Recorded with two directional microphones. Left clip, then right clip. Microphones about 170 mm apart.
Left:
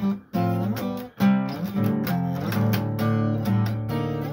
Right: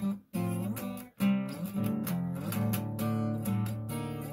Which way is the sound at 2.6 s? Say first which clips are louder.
Left 8 dB; 15° right (ahead or behind).